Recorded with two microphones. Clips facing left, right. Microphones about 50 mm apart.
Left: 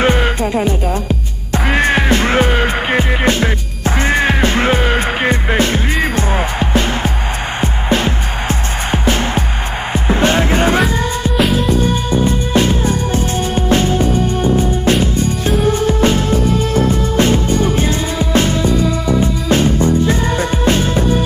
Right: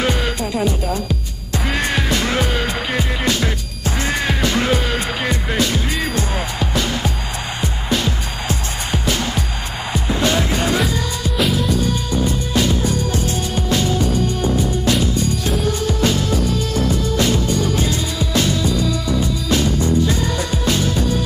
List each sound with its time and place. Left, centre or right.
0.0 s music: left
11.3 s music: centre
11.7 s music: left